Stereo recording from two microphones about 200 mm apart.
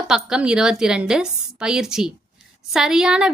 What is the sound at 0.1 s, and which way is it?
Speech, 5° right (ahead or behind).